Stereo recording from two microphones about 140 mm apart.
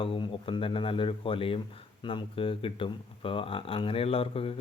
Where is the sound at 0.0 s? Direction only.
40° left (ahead or behind).